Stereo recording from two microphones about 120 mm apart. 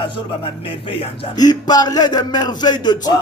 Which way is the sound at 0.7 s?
50° left (ahead or behind).